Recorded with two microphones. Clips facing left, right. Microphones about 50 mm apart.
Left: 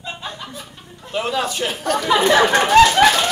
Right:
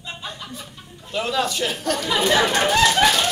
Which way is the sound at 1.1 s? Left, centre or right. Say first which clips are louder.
Left 1 dB; centre.